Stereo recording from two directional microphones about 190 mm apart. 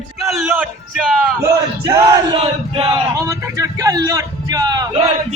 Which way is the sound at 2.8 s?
15° right (ahead or behind).